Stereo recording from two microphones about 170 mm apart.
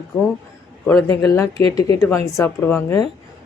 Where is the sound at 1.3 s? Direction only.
15° left (ahead or behind).